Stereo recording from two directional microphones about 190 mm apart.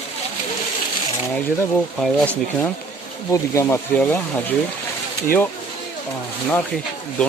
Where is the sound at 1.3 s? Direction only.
5° left (ahead or behind).